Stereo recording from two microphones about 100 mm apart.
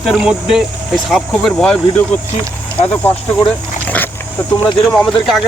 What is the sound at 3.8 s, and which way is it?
Dog, 15° left (ahead or behind).